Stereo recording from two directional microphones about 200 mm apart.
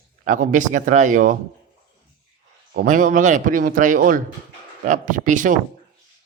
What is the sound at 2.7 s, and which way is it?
Speech, 40° right (ahead or behind).